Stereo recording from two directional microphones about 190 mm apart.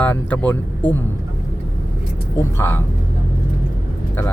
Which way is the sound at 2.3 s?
15° left (ahead or behind).